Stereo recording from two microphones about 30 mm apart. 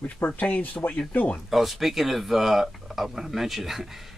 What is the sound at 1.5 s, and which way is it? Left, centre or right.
Speech, centre.